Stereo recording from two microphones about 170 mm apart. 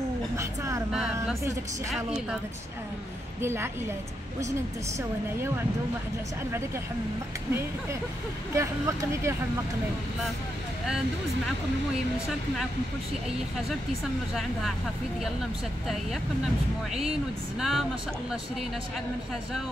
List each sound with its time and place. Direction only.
0.4 s vehicle: 20° right (ahead or behind)
3.3 s speech: 15° right (ahead or behind)
8.5 s speech: 15° right (ahead or behind)
17.6 s speech: centre (ahead or behind)